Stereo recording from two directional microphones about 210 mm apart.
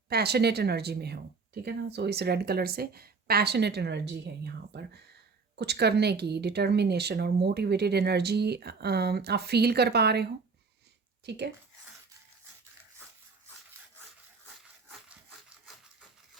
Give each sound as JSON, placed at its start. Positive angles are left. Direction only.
{"t": 0.1, "sound": "a woman's voice", "side_deg": -50}
{"t": 11.3, "sound": "a woman's voice", "side_deg": -55}
{"t": 15.3, "sound": "wood", "side_deg": 0}